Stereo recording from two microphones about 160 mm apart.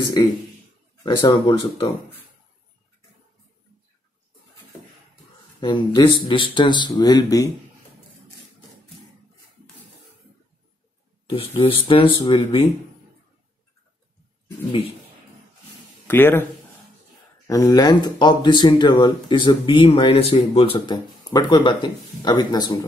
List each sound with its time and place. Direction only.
0.0 s speech: 25° left (ahead or behind)
5.6 s speech: 30° left (ahead or behind)
11.2 s speech: 35° left (ahead or behind)
14.7 s speech: 35° left (ahead or behind)
16.1 s speech: 15° left (ahead or behind)
17.5 s speech: 20° left (ahead or behind)
21.2 s speech: 25° left (ahead or behind)